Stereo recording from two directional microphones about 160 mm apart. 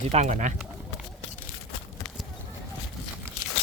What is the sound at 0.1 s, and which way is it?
Speech, 45° right (ahead or behind).